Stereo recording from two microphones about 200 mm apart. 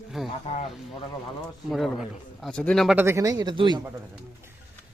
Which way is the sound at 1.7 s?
Centre (ahead or behind).